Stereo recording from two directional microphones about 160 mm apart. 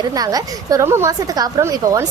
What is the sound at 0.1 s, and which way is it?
A woman's voice, 25° right (ahead or behind).